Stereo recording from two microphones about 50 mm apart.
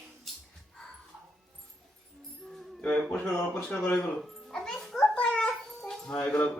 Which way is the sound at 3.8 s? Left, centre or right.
Left.